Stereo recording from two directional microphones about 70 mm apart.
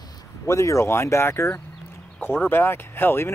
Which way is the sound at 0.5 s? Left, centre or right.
Left.